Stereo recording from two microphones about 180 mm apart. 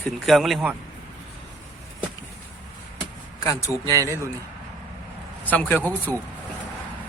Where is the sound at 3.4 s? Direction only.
15° left (ahead or behind).